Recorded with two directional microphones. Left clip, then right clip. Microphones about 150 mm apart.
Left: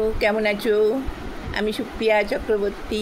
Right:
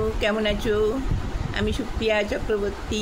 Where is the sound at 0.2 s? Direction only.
30° left (ahead or behind).